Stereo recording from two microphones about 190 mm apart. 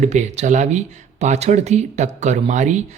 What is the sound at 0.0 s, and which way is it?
Speech, 35° right (ahead or behind).